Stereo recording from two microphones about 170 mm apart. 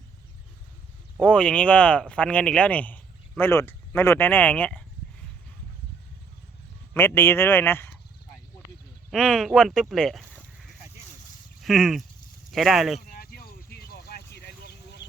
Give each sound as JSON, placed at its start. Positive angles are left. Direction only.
{"t": 1.2, "sound": "speech", "side_deg": 5}
{"t": 6.9, "sound": "speech", "side_deg": 15}
{"t": 9.0, "sound": "speech", "side_deg": 5}
{"t": 9.9, "sound": "a sound", "side_deg": 0}
{"t": 11.6, "sound": "speech", "side_deg": 0}
{"t": 13.1, "sound": "vehicle", "side_deg": 65}
{"t": 14.3, "sound": "a sound", "side_deg": 70}